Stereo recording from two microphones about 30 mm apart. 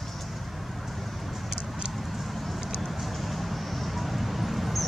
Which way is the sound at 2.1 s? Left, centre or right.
Centre.